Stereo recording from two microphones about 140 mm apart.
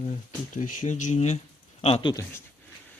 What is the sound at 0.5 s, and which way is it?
Speech, 65° left (ahead or behind).